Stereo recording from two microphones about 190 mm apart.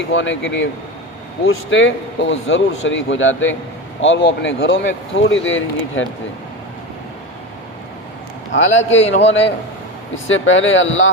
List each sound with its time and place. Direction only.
0.1 s speech: 80° left
1.5 s speech: 90° left
4.0 s speech: 75° left (ahead or behind)
8.5 s speech: 85° left
8.8 s a man's voice: 35° left (ahead or behind)
10.2 s speech: 80° left